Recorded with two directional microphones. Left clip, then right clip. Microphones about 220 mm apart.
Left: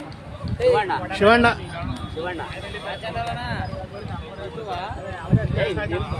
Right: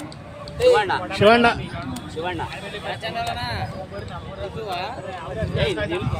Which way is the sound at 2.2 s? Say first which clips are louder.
Right 2 dB; 55° right (ahead or behind).